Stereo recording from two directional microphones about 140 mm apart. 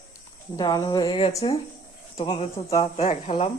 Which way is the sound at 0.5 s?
25° left (ahead or behind).